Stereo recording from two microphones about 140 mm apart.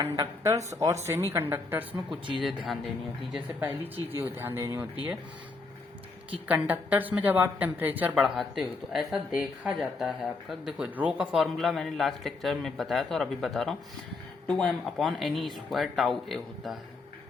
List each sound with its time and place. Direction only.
0.0 s a woman's voice: 20° right (ahead or behind)
3.6 s a woman's voice: 15° right (ahead or behind)
6.5 s a woman's voice: 10° right (ahead or behind)